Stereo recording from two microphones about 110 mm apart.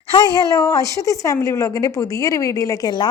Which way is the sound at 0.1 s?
40° left (ahead or behind).